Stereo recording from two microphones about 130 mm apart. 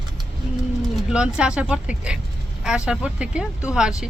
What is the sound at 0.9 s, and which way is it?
Speech, 5° right (ahead or behind).